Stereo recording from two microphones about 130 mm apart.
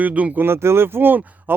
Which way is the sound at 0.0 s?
10° right (ahead or behind).